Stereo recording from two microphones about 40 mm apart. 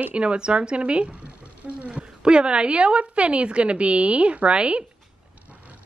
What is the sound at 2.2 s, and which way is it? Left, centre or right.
A woman's voice, right.